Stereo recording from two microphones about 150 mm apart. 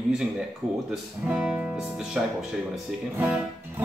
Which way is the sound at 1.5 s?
5° right (ahead or behind).